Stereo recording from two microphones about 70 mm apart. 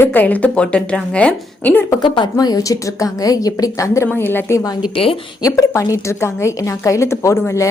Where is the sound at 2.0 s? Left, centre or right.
Left.